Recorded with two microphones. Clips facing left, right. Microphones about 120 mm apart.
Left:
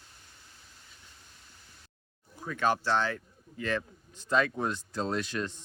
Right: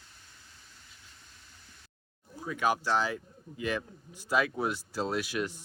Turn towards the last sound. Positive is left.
turn(degrees=-10)  # may be behind; listen again after turning